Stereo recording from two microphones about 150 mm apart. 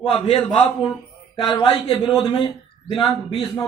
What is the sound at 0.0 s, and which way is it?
Speech, 35° left (ahead or behind).